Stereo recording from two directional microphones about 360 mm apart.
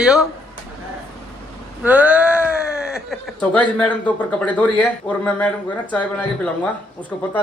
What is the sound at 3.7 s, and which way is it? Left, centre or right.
A woman's voice, centre.